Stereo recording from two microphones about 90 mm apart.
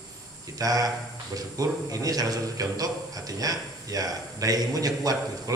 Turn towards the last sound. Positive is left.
turn(degrees=-45)  # may be behind; listen again after turning